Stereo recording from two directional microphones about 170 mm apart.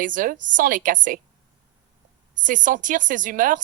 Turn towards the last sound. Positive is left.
turn(degrees=-50)  # may be behind; listen again after turning